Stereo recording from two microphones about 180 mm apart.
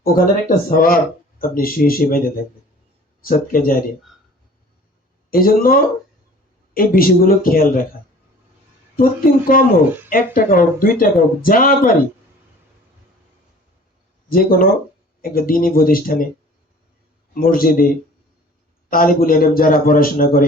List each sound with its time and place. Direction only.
0.0 s speech: 55° left (ahead or behind)
5.3 s speech: 55° left (ahead or behind)
9.5 s speech: 55° left (ahead or behind)
14.3 s speech: 55° left (ahead or behind)
17.4 s speech: 55° left (ahead or behind)
18.9 s speech: 50° left (ahead or behind)